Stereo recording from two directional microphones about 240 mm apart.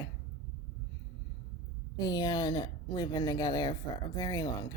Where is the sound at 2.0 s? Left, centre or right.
Centre.